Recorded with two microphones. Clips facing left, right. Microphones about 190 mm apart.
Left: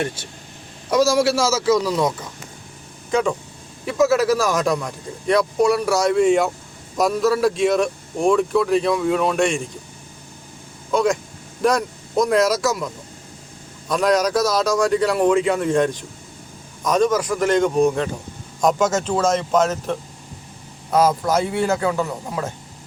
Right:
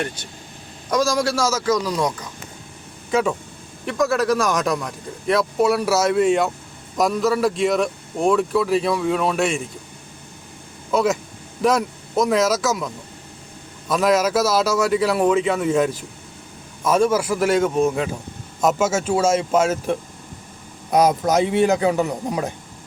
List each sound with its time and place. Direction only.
0.9 s a man's voice: 10° left (ahead or behind)
1.6 s speech: 25° left (ahead or behind)
1.9 s speech: 5° left (ahead or behind)
10.9 s speech: 5° right (ahead or behind)